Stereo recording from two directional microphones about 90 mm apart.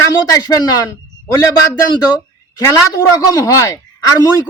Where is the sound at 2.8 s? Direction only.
45° left (ahead or behind).